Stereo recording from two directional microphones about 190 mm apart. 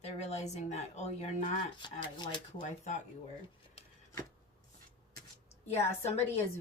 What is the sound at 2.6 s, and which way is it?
Speech, 40° left (ahead or behind).